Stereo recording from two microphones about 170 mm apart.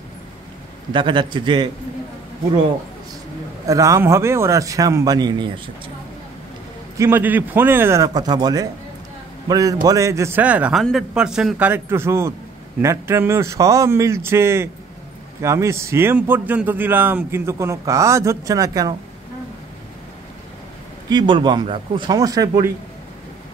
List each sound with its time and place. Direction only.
0.9 s a man's voice: 30° right (ahead or behind)
3.6 s a man's voice: 20° right (ahead or behind)
7.0 s a man's voice: 10° right (ahead or behind)
21.1 s a man's voice: 25° right (ahead or behind)